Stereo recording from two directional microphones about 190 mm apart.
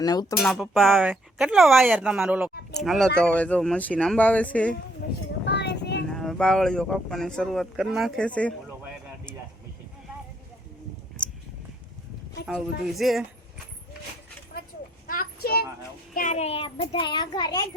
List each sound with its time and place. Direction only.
0.0 s a child's voice: 20° left (ahead or behind)
0.4 s speech: centre (ahead or behind)
5.5 s a sound: 65° left (ahead or behind)
6.1 s speech: 5° left (ahead or behind)
12.8 s speech: centre (ahead or behind)
15.0 s a sound: 50° left (ahead or behind)
16.1 s a child's voice: 40° left (ahead or behind); by 17.7 s 20° left (ahead or behind)